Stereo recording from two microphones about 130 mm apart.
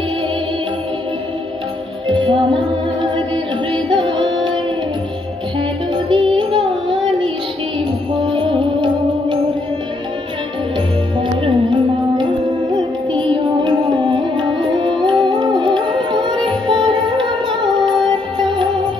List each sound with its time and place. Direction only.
2.0 s music: 40° right (ahead or behind)
3.7 s music: 40° right (ahead or behind)
6.1 s music: 40° right (ahead or behind)
8.3 s music: 40° right (ahead or behind)
11.1 s music: 40° right (ahead or behind)
13.1 s carnatic music: 40° right (ahead or behind)